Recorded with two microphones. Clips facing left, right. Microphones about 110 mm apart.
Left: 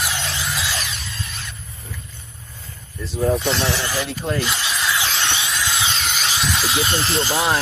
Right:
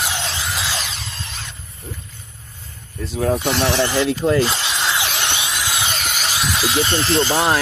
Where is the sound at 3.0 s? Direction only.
85° right.